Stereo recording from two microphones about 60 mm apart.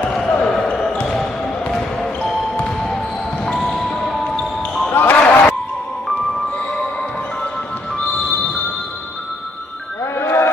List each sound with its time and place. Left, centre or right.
0.3 s basketball bounce: centre
1.0 s music: centre
3.5 s basketball bounce: centre
4.9 s basketball bounce: left
10.1 s a sound: left